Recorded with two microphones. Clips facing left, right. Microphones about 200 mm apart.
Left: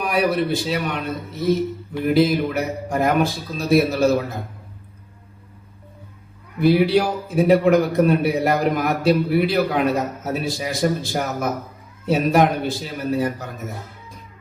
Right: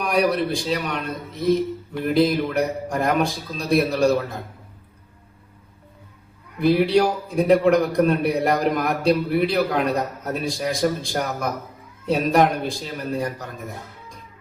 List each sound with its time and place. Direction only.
0.0 s a man's voice: centre (ahead or behind)
6.6 s a man's voice: centre (ahead or behind)